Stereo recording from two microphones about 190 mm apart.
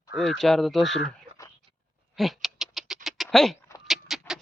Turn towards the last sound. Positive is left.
turn(degrees=0)  # may be behind; listen again after turning